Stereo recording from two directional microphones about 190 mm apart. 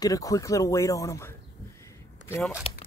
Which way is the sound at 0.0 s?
20° left (ahead or behind).